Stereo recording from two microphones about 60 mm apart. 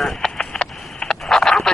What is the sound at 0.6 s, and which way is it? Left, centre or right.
Vehicle, centre.